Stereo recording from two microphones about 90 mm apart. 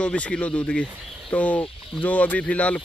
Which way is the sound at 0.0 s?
10° left (ahead or behind).